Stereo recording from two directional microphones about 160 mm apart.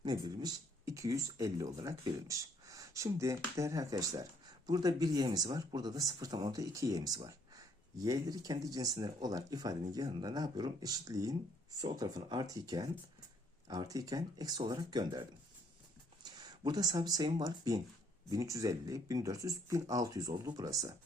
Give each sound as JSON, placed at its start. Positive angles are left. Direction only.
{"t": 0.0, "sound": "speech", "side_deg": -25}